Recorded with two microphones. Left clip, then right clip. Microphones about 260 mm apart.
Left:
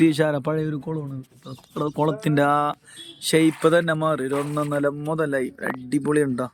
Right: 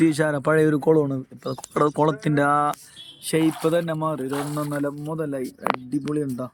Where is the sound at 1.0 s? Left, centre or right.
Right.